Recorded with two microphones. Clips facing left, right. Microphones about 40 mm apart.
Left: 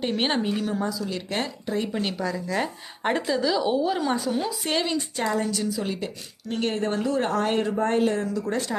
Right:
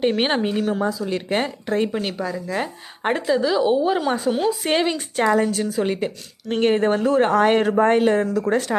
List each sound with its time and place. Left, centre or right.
0.0 s speech: right
0.7 s speech: right
1.6 s speech: right
1.9 s a woman's voice: centre
4.2 s a woman's voice: right
4.9 s a woman's voice: right